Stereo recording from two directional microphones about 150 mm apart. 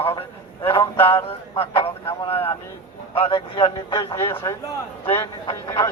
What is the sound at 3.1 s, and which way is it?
A man's voice, 35° left (ahead or behind).